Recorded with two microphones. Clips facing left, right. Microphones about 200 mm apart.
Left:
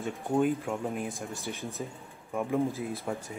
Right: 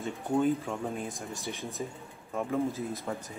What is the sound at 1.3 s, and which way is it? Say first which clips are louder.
Speech: left 1 dB; 15° right (ahead or behind).